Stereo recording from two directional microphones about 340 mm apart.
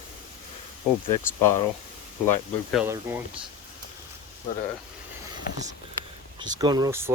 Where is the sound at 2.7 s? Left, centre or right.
Centre.